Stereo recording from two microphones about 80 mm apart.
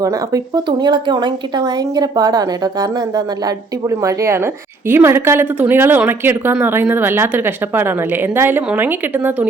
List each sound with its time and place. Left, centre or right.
0.0 s speech: right
3.8 s a woman's voice: right